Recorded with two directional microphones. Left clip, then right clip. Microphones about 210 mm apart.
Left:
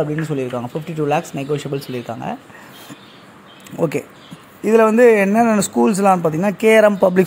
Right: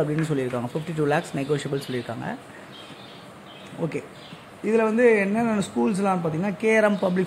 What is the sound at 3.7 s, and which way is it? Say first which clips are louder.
A man's voice: left 10 dB; 40° left (ahead or behind).